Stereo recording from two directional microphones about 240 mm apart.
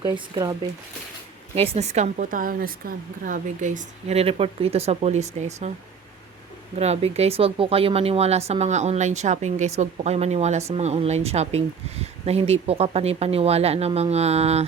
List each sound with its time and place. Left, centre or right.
0.0 s speech: centre
1.5 s a woman's voice: right
6.7 s a woman's voice: right